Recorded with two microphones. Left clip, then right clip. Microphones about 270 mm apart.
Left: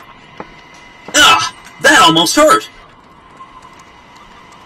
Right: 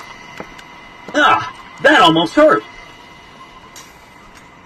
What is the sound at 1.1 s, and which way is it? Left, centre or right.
Music, left.